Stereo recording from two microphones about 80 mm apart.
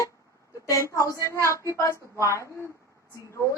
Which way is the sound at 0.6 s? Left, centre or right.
Left.